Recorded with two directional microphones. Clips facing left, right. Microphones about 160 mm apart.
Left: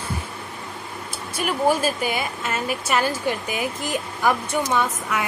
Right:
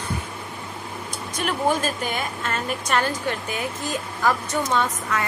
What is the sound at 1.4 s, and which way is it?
A woman's voice, 10° left (ahead or behind).